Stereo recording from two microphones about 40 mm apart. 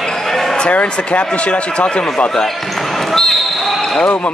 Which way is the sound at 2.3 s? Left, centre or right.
Centre.